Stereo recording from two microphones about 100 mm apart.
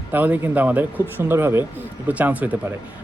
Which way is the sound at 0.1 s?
15° right (ahead or behind).